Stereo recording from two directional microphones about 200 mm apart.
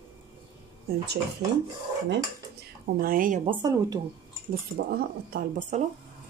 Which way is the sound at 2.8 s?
45° right (ahead or behind).